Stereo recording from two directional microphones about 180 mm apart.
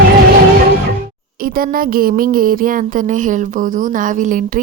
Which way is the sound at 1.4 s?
55° right (ahead or behind).